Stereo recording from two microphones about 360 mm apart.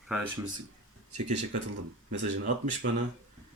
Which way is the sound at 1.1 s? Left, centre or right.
Right.